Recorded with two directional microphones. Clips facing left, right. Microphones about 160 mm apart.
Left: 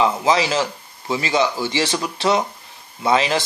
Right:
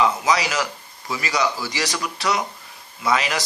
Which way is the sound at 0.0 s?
25° left (ahead or behind).